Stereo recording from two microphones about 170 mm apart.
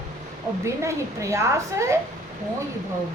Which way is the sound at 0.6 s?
15° right (ahead or behind).